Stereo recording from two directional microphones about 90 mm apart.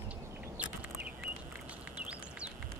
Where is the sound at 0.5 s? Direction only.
15° right (ahead or behind).